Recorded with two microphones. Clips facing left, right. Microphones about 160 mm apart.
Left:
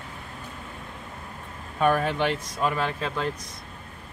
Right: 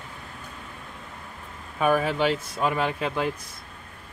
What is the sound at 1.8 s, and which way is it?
Speech, 5° right (ahead or behind).